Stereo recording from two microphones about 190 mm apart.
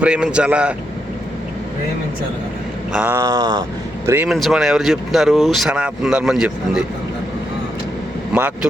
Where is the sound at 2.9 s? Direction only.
10° right (ahead or behind).